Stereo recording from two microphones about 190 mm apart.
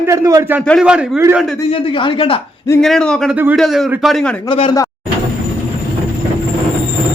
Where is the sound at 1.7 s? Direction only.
25° left (ahead or behind).